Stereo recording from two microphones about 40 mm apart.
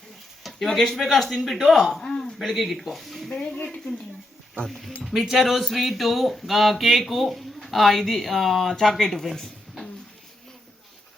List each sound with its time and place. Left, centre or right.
0.4 s speech: centre
2.5 s speech: centre
3.2 s speech: centre
4.7 s speech: centre